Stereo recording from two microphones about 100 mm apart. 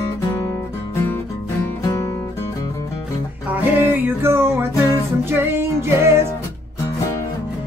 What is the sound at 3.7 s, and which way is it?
Music, 20° right (ahead or behind).